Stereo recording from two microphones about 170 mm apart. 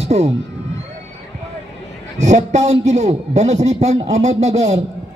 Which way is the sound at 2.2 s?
40° right (ahead or behind).